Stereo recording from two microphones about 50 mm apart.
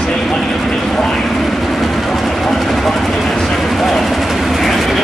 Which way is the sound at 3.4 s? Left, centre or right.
Centre.